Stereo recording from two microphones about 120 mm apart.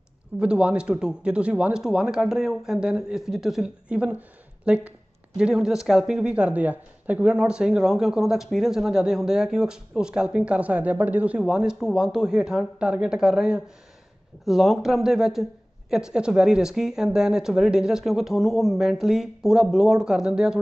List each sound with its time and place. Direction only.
0.3 s a man's voice: 10° right (ahead or behind)